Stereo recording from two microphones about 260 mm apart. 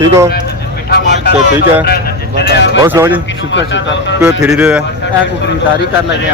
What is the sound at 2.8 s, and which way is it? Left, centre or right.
Speech, centre.